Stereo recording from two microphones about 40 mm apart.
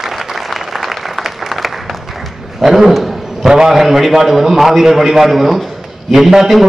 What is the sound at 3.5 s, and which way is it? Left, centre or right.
A man's voice, centre.